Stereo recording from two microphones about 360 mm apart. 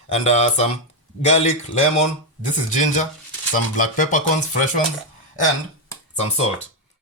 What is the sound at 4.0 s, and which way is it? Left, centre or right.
Speech, left.